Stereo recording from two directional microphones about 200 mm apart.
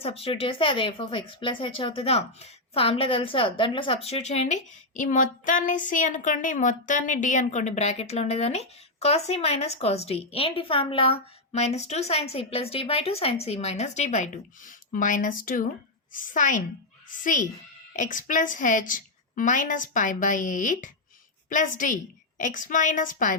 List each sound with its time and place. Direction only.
0.0 s speech: 30° left (ahead or behind)